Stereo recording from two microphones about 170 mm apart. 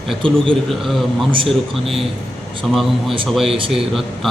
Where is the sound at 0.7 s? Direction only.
Centre (ahead or behind).